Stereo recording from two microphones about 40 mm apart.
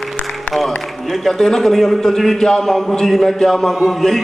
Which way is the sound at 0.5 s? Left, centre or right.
Centre.